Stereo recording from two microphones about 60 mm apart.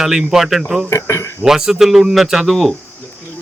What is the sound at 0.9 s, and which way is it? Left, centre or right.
Speech, left.